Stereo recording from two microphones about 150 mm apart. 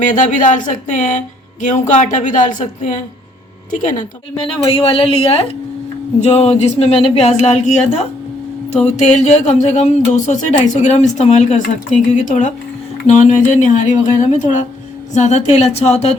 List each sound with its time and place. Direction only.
0.0 s speech: 55° left (ahead or behind)
4.4 s a woman's voice: 40° left (ahead or behind)